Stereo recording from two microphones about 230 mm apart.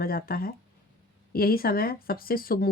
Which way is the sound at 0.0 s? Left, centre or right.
Left.